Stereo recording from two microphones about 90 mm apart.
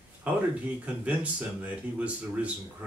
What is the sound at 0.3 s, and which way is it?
Speech, 15° right (ahead or behind).